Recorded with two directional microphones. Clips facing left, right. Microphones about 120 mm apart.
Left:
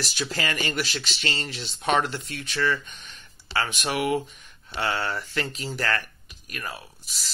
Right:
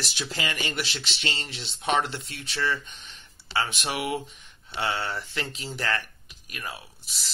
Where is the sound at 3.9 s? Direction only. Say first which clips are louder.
Left 4 dB; 10° right (ahead or behind).